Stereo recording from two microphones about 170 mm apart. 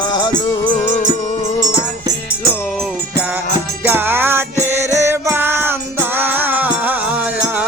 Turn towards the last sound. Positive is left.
turn(degrees=-10)  # may be behind; listen again after turning